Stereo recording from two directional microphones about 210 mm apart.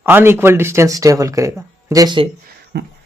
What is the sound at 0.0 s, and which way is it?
Speech, 10° right (ahead or behind).